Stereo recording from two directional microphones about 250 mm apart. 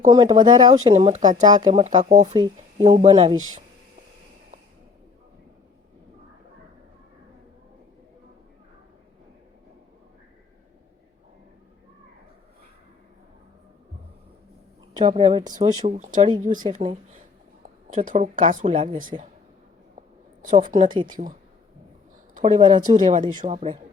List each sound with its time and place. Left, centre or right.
0.1 s speech: centre
1.5 s speech: centre
15.0 s speech: right
20.5 s speech: right
20.9 s speech: centre
22.4 s speech: right